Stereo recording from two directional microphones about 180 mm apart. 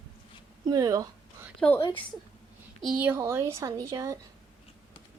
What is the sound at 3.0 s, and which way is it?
Speech, 15° right (ahead or behind).